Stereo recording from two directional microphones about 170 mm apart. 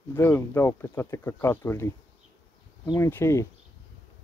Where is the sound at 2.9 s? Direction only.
15° left (ahead or behind).